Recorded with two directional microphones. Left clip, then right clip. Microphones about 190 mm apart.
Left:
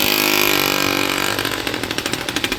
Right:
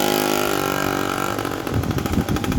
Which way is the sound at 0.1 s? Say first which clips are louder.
Left 4 dB; 40° right (ahead or behind).